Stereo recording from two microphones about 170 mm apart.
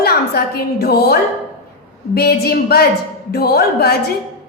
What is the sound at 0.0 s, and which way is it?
A woman's voice, 65° left (ahead or behind).